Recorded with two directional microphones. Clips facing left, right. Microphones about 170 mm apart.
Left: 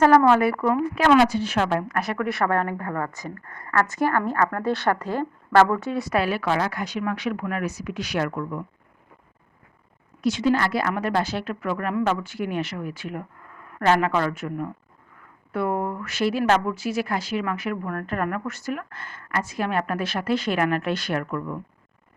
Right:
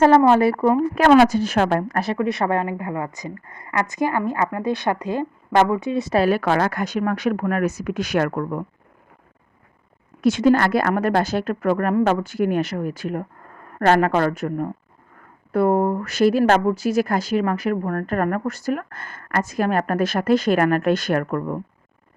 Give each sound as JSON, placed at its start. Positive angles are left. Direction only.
{"t": 0.0, "sound": "a woman's voice", "side_deg": -25}
{"t": 0.9, "sound": "speech", "side_deg": -50}
{"t": 2.0, "sound": "a woman's voice", "side_deg": -25}
{"t": 6.1, "sound": "speech", "side_deg": -45}
{"t": 10.2, "sound": "speech", "side_deg": -50}